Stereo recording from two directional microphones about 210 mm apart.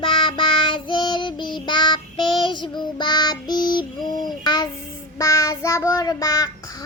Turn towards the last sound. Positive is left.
turn(degrees=15)  # may be behind; listen again after turning